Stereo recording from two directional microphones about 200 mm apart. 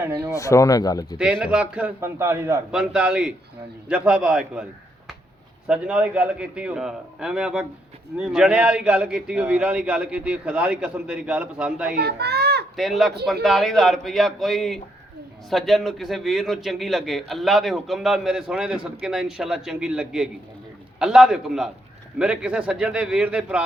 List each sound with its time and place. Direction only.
0.3 s speech: 15° left (ahead or behind)
1.2 s a man's voice: 5° right (ahead or behind)
5.6 s a man's voice: 5° right (ahead or behind)
11.9 s a child's voice: 55° right (ahead or behind)
12.7 s a man's voice: centre (ahead or behind)